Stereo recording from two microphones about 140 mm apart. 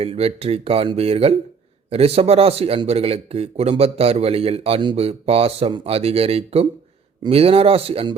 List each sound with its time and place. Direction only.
0.0 s speech: 45° right (ahead or behind)